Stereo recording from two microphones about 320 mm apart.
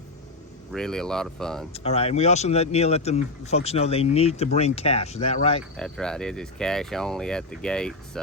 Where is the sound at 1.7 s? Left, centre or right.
Centre.